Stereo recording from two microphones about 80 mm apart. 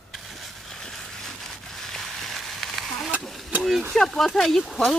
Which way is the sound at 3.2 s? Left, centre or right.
Centre.